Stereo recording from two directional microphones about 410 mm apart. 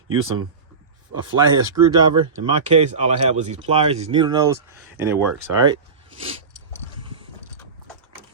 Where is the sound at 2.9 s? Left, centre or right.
Centre.